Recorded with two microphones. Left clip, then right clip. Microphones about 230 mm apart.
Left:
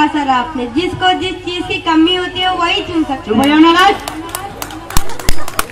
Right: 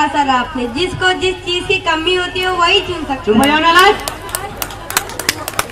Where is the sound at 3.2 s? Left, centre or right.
Right.